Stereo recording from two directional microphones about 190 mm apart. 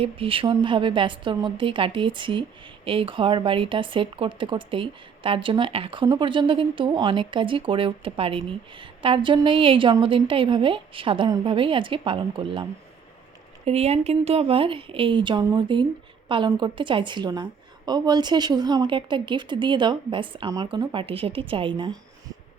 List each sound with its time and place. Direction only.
0.0 s speech: 30° right (ahead or behind)
13.7 s speech: 35° right (ahead or behind)